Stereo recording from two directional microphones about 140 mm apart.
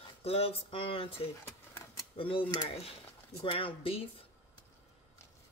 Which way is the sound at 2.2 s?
40° left (ahead or behind).